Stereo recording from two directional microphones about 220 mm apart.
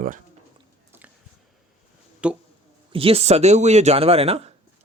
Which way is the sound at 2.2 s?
5° right (ahead or behind).